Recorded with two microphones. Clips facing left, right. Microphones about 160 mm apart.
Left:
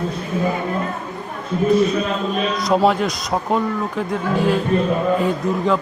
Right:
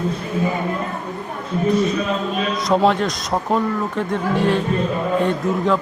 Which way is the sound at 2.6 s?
Centre (ahead or behind).